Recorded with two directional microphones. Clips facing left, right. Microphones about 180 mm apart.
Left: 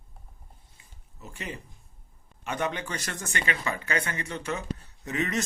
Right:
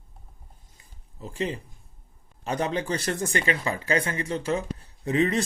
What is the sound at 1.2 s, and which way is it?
Speech, 30° right (ahead or behind).